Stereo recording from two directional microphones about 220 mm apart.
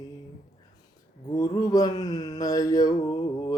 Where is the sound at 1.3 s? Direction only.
15° left (ahead or behind).